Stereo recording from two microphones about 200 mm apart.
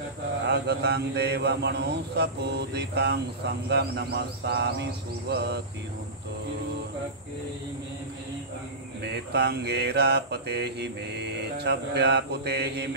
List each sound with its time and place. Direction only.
0.5 s mantra: 55° right (ahead or behind)
9.0 s mantra: 55° right (ahead or behind)